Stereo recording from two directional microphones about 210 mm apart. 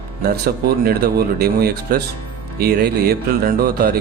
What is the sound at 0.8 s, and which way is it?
A man's voice, 45° right (ahead or behind).